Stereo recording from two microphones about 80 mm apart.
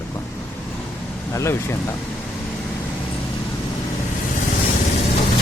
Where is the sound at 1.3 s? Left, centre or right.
Left.